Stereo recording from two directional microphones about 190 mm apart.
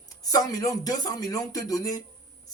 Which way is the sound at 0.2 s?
20° left (ahead or behind).